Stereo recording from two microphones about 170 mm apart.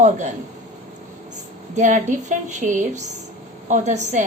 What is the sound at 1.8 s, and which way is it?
A woman's voice, 45° right (ahead or behind).